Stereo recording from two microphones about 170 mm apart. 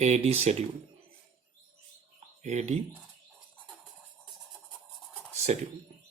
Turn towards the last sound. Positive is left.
turn(degrees=-40)  # may be behind; listen again after turning